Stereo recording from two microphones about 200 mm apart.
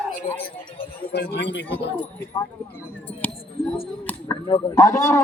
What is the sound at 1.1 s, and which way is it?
Speech, 55° left (ahead or behind).